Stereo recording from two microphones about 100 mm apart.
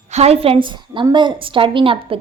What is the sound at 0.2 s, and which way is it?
A woman's voice, 80° right.